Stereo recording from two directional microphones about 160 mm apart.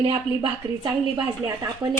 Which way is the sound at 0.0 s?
30° right (ahead or behind).